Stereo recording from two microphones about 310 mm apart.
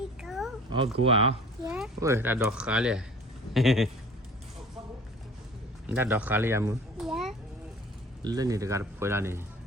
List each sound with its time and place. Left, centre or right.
0.2 s a sound: centre
0.9 s speech: centre
1.7 s speech: centre
5.9 s a child's voice: centre
8.2 s speech: centre